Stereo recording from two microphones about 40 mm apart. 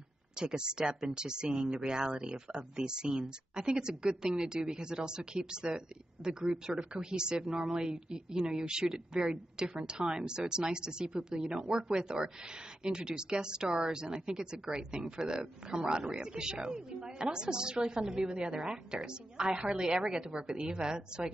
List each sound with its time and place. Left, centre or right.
0.4 s speech: centre